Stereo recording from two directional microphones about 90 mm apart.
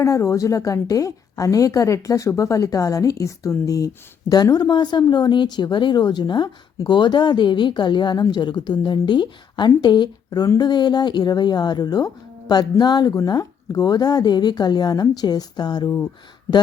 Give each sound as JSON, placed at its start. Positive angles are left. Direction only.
{"t": 0.0, "sound": "a woman's voice", "side_deg": 35}
{"t": 4.4, "sound": "a woman's voice", "side_deg": 50}